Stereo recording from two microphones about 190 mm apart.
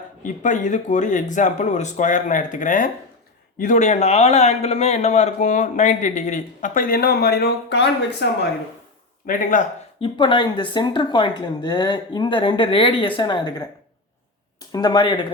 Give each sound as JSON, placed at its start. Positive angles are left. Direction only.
{"t": 0.2, "sound": "a man's voice", "side_deg": 40}
{"t": 9.2, "sound": "speech", "side_deg": 45}
{"t": 10.0, "sound": "speech", "side_deg": 25}
{"t": 14.7, "sound": "speech", "side_deg": 20}